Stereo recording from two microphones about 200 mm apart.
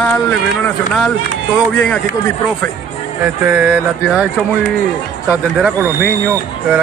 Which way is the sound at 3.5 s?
10° right (ahead or behind).